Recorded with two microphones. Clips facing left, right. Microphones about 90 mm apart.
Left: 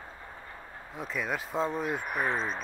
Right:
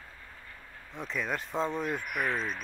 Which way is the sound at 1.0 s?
5° left (ahead or behind).